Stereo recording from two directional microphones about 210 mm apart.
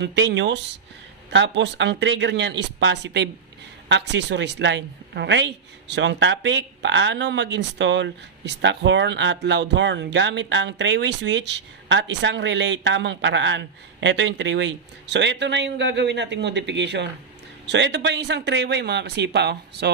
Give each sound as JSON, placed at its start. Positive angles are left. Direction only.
{"t": 0.0, "sound": "a woman's voice", "side_deg": -55}